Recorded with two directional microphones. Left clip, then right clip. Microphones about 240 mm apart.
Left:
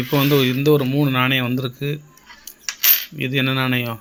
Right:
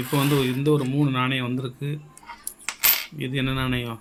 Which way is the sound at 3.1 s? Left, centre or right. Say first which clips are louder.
Left 7 dB; left.